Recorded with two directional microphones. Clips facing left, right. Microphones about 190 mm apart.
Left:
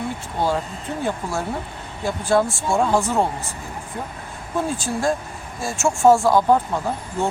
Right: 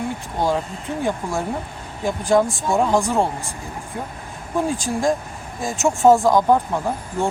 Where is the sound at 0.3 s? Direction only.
15° right (ahead or behind).